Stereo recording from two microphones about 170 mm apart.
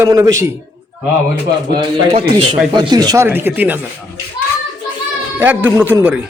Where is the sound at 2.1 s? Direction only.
35° right (ahead or behind); by 4.2 s 10° right (ahead or behind).